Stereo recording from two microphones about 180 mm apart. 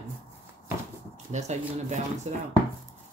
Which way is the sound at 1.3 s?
40° right (ahead or behind).